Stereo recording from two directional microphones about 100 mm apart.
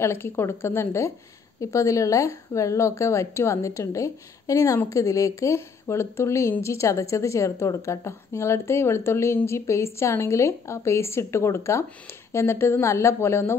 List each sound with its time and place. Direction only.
0.0 s a woman's voice: 25° left (ahead or behind)